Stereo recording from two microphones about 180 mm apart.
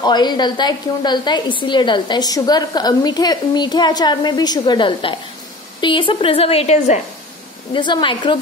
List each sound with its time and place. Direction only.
0.0 s a woman's voice: 25° left (ahead or behind)
7.7 s a woman's voice: 25° left (ahead or behind)